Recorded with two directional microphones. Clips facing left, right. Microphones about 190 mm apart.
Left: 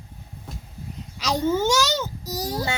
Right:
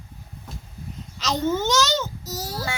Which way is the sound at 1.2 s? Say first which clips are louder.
Left 1 dB; 10° left (ahead or behind).